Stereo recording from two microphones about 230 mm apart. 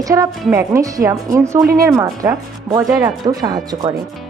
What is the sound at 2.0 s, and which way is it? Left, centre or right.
Speech, centre.